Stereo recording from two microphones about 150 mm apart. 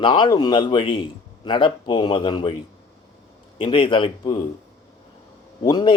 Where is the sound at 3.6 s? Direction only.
35° left (ahead or behind).